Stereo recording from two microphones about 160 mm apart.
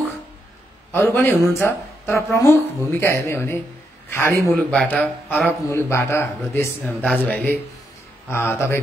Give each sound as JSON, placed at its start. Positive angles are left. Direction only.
{"t": 0.9, "sound": "speech", "side_deg": 15}